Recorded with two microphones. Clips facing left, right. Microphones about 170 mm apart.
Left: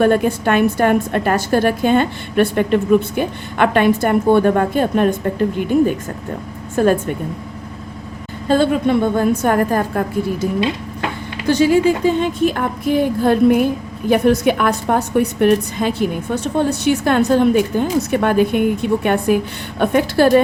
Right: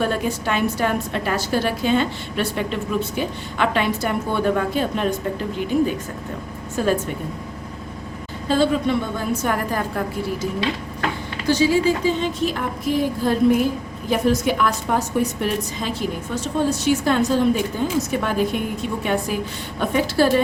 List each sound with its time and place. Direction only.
0.0 s a woman's voice: 55° left (ahead or behind)
6.8 s a woman's voice: 55° left (ahead or behind)
8.4 s a woman's voice: 55° left (ahead or behind)
11.4 s a woman's voice: 55° left (ahead or behind)